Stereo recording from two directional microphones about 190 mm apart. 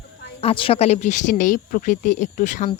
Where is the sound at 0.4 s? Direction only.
30° left (ahead or behind).